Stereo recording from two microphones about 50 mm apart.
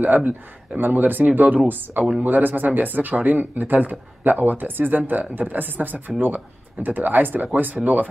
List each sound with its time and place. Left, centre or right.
0.0 s speech: right